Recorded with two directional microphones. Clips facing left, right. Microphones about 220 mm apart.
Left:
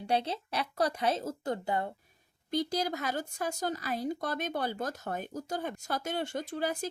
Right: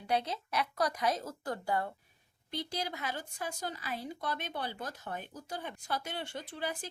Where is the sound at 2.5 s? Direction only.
45° left (ahead or behind).